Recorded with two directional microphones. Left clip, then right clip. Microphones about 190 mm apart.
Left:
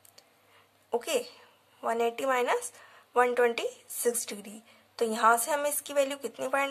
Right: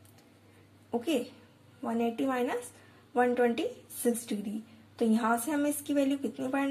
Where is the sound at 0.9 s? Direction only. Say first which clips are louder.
Left 2 dB; 30° left (ahead or behind).